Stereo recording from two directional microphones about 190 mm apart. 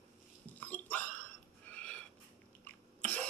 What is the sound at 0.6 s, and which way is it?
Hiccup, 10° left (ahead or behind).